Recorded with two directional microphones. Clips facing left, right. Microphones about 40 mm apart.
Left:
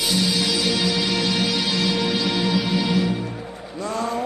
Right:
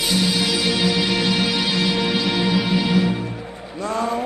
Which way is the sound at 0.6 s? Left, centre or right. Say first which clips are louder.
Right 2 dB; right.